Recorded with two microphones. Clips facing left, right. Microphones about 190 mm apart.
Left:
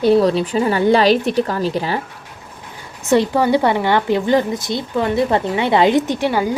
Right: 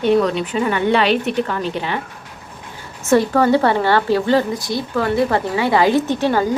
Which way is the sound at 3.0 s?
15° left (ahead or behind).